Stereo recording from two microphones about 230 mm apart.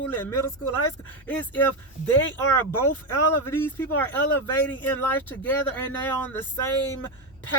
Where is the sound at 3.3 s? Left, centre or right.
Centre.